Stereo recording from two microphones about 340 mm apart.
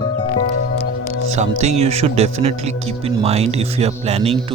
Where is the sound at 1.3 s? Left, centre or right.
Centre.